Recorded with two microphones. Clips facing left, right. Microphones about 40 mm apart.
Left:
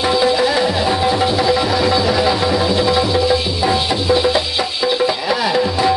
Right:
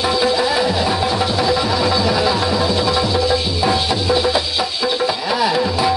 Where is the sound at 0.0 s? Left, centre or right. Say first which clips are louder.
Left 2 dB; centre.